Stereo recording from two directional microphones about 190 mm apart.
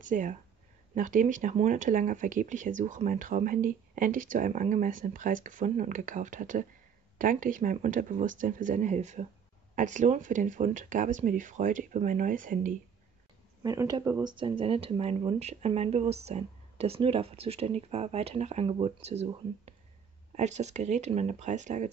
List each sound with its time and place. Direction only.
0.0 s speech: 45° right (ahead or behind)
13.6 s speech: 20° right (ahead or behind); by 21.8 s 40° right (ahead or behind)